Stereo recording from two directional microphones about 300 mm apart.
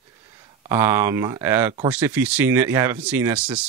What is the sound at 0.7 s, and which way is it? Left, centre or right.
Speech, centre.